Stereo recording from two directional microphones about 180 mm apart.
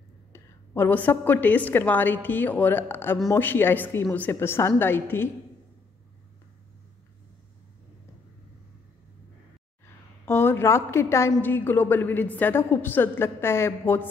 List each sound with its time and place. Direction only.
0.3 s a woman's voice: 10° left (ahead or behind)
10.2 s a woman's voice: 15° left (ahead or behind)